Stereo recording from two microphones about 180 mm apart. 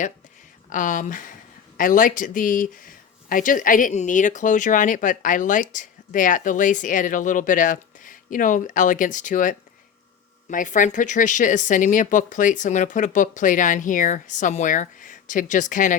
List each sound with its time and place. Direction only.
0.7 s speech: 45° left (ahead or behind)